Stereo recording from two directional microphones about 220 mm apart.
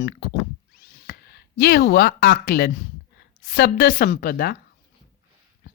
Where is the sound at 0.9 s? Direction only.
45° left (ahead or behind).